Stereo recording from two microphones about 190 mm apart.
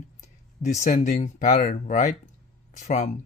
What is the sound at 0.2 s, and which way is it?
Speech, 40° left (ahead or behind).